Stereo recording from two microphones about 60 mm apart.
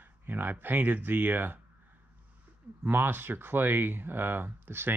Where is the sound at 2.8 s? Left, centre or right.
Right.